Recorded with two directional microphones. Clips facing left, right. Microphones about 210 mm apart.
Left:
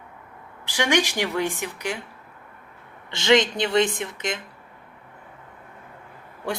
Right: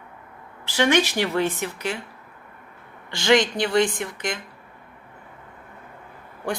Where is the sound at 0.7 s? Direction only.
15° left (ahead or behind).